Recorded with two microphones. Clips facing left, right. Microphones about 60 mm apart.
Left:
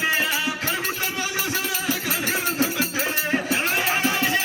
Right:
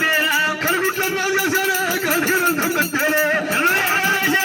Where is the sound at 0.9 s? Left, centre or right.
Right.